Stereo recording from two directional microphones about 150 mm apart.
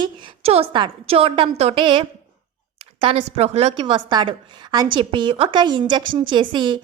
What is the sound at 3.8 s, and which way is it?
A woman's voice, 30° right (ahead or behind).